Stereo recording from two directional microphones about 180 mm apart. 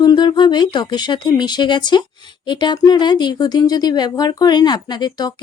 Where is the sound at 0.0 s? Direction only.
25° left (ahead or behind).